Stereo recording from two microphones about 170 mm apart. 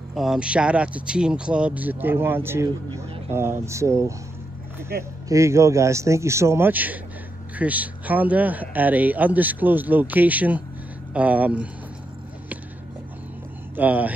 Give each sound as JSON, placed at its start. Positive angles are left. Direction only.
{"t": 0.1, "sound": "speech", "side_deg": 0}
{"t": 5.3, "sound": "speech", "side_deg": -15}
{"t": 13.7, "sound": "speech", "side_deg": -10}